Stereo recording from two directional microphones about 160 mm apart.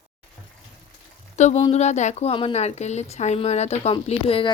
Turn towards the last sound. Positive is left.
turn(degrees=35)  # may be behind; listen again after turning